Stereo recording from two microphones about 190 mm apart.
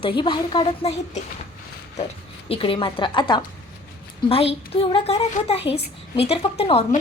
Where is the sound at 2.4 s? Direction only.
30° left (ahead or behind).